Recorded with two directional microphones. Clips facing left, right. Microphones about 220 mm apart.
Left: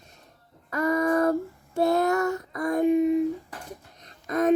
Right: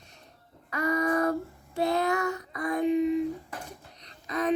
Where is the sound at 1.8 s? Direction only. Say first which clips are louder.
Left 4 dB; 45° left (ahead or behind).